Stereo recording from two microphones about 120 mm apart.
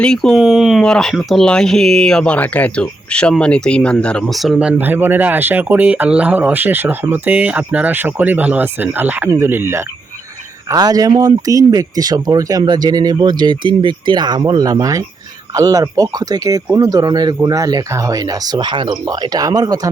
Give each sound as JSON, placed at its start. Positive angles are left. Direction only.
{"t": 0.0, "sound": "speech", "side_deg": 5}
{"t": 4.8, "sound": "speech", "side_deg": -15}
{"t": 10.7, "sound": "speech", "side_deg": -30}